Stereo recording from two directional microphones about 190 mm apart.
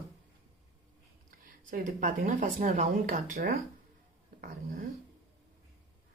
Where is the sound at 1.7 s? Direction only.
45° right (ahead or behind).